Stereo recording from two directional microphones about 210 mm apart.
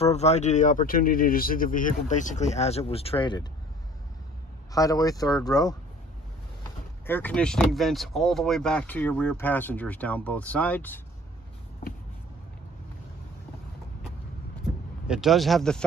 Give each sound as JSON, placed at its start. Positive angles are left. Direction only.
{"t": 0.0, "sound": "speech", "side_deg": 30}
{"t": 4.7, "sound": "speech", "side_deg": 15}
{"t": 7.1, "sound": "speech", "side_deg": 10}
{"t": 15.0, "sound": "a man's voice", "side_deg": 0}